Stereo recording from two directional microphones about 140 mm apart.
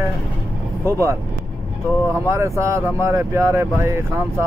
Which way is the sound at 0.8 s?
20° right (ahead or behind).